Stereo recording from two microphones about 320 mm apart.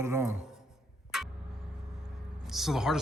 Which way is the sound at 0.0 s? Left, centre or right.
Centre.